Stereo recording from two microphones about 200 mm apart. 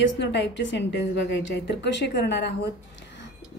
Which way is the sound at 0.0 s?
60° left (ahead or behind).